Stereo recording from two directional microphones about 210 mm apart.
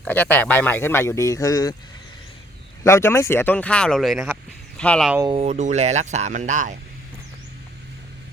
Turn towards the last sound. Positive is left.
turn(degrees=-35)  # may be behind; listen again after turning